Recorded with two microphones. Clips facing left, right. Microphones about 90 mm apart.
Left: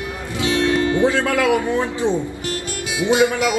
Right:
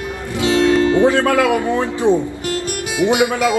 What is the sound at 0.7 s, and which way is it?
Music, 40° right (ahead or behind).